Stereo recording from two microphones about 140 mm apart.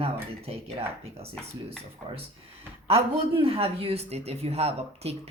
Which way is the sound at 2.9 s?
45° right (ahead or behind).